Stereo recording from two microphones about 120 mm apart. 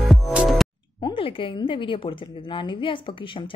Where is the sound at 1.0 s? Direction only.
45° left (ahead or behind).